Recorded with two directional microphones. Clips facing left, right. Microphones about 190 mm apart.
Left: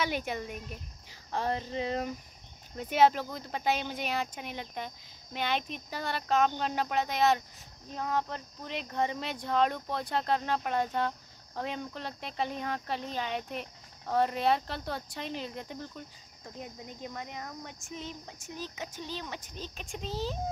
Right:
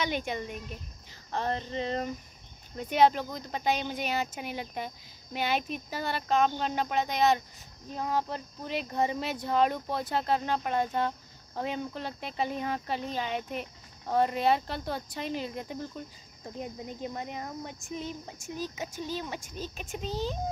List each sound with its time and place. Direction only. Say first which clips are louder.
0.0 s speech: right 1 dB; 5° left (ahead or behind)
1.3 s a sound: even; 10° left (ahead or behind)
2.8 s speech: right 1 dB; 5° left (ahead or behind)
17.0 s speech: right 3 dB; 25° right (ahead or behind)
18.4 s speech: right 4 dB; 10° right (ahead or behind)